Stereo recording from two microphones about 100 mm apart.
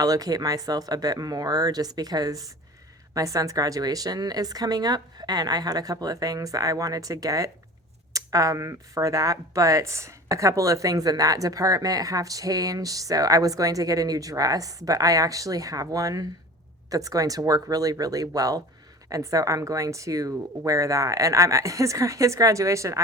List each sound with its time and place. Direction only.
0.0 s speech: 40° right (ahead or behind)